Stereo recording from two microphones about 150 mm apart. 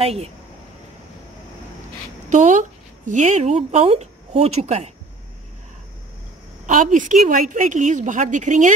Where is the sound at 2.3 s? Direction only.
55° right (ahead or behind).